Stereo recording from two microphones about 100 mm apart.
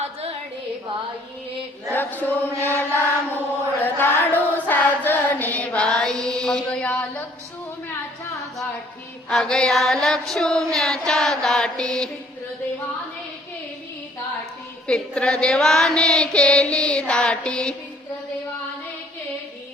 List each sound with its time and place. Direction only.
1.9 s chant: 20° left (ahead or behind)
9.3 s music: 10° left (ahead or behind)
14.8 s a sound: 10° left (ahead or behind)